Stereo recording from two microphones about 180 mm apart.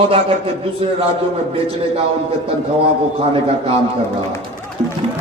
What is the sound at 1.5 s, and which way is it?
Speech, 30° right (ahead or behind).